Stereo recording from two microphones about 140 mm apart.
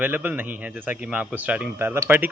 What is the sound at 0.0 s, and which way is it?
Speech, 10° right (ahead or behind).